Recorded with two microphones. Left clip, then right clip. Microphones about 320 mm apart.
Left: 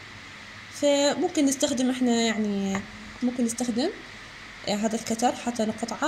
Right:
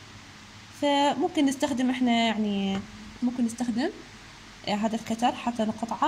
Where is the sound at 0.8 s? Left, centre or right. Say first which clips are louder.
Left 2 dB; right.